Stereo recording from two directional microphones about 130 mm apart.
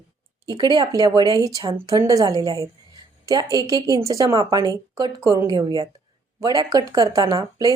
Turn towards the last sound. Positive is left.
turn(degrees=-30)  # may be behind; listen again after turning